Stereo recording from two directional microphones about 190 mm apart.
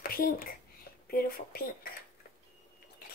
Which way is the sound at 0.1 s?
50° left (ahead or behind).